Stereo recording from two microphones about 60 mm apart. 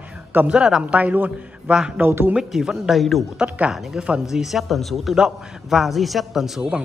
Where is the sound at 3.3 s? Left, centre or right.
Centre.